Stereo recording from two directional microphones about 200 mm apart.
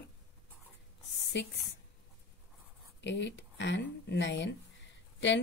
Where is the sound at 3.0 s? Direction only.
65° left (ahead or behind).